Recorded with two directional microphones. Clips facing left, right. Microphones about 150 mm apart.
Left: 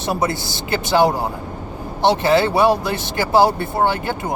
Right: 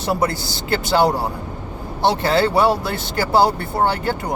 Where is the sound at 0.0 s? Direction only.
20° left (ahead or behind).